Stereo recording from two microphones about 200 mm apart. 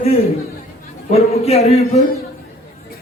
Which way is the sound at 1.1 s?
30° left (ahead or behind).